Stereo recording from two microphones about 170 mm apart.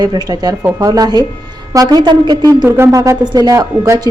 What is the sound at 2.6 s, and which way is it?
A woman's voice, 15° right (ahead or behind).